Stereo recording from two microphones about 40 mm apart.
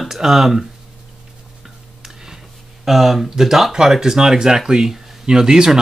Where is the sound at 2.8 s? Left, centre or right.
Centre.